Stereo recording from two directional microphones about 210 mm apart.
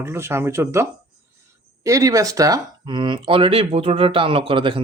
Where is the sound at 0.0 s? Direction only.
10° right (ahead or behind).